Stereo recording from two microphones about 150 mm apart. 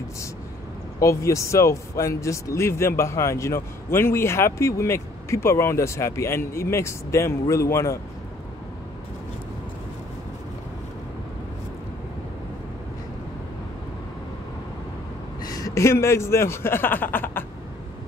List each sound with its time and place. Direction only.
0.9 s a man's voice: 20° left (ahead or behind)
15.4 s speech: 25° left (ahead or behind)